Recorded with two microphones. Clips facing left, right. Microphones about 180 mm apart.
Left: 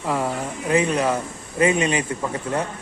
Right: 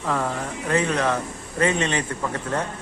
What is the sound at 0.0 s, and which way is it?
Speech, 10° left (ahead or behind).